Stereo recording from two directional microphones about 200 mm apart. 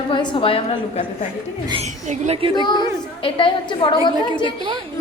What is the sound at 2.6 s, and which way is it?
A woman's voice, 20° left (ahead or behind).